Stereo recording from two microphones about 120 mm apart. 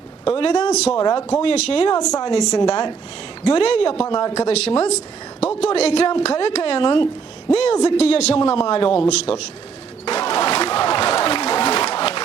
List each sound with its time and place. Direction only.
0.6 s speech: 65° left (ahead or behind)
0.9 s speech: 40° left (ahead or behind)
1.3 s a man's voice: 60° left (ahead or behind)
2.1 s speech: 35° left (ahead or behind)
3.5 s a man's voice: 55° left (ahead or behind)
4.0 s speech: 35° left (ahead or behind)
4.4 s a man's voice: 60° left (ahead or behind)
7.5 s a man's voice: 60° left (ahead or behind)
10.1 s a sound: 60° left (ahead or behind)